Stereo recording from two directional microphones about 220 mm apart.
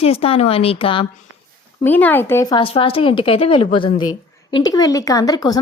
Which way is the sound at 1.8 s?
10° left (ahead or behind).